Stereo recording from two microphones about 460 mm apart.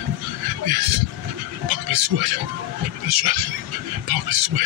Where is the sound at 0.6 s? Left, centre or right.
Right.